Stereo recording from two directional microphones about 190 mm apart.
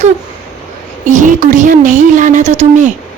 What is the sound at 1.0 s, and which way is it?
A woman's voice, 40° right (ahead or behind).